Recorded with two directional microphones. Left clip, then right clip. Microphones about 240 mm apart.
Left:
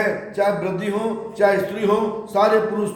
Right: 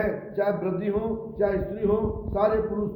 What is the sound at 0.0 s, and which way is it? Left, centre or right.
A man's voice, centre.